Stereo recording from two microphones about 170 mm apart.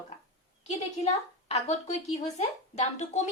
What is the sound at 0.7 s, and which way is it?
A woman's voice, 40° left (ahead or behind).